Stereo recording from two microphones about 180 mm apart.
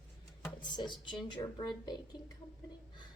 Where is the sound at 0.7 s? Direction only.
25° left (ahead or behind).